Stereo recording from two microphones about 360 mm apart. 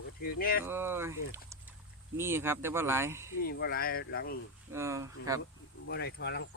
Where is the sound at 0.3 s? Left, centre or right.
Left.